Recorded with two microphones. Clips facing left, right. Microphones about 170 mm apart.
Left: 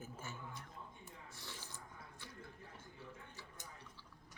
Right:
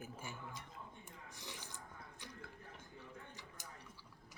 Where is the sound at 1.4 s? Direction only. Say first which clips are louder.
Right 2 dB; 15° right (ahead or behind).